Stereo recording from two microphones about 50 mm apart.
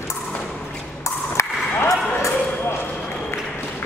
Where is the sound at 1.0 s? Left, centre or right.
Left.